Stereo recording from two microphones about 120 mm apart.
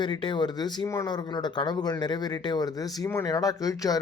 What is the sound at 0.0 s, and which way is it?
Speech, 40° left (ahead or behind).